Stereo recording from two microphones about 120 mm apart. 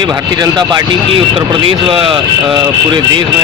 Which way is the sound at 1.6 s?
50° right (ahead or behind).